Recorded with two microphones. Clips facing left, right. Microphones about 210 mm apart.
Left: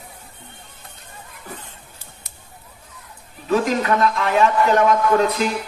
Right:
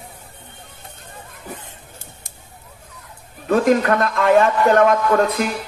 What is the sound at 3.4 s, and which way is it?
A man's voice, 55° right (ahead or behind).